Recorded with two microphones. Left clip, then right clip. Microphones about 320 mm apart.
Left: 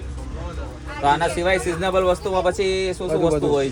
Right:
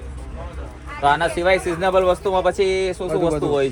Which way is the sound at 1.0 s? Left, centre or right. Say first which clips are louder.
Right 2 dB; centre.